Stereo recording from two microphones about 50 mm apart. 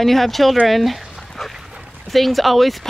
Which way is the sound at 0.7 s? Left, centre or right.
Centre.